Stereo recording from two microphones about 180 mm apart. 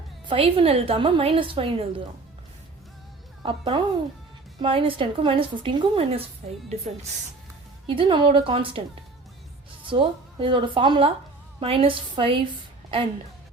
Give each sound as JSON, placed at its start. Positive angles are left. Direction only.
{"t": 0.3, "sound": "a woman's voice", "side_deg": -30}
{"t": 3.4, "sound": "a woman's voice", "side_deg": -25}
{"t": 9.8, "sound": "speech", "side_deg": -30}